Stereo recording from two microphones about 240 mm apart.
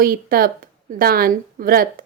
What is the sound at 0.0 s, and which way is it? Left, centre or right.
A woman's voice, right.